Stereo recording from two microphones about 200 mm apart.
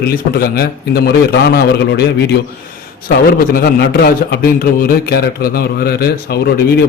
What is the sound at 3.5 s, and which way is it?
A man's voice, 50° left (ahead or behind).